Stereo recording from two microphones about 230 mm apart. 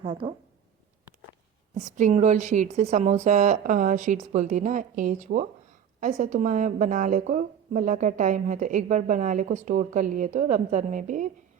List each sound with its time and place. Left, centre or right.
0.0 s speech: right
1.7 s a woman's voice: right